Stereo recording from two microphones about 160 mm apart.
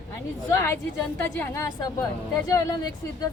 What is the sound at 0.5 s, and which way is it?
Speech, 15° left (ahead or behind).